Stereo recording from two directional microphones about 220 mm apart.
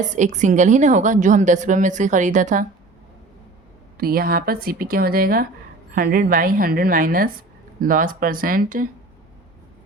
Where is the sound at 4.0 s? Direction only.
40° right (ahead or behind).